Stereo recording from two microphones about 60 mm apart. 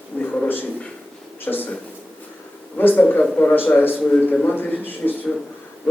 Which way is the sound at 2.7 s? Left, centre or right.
Left.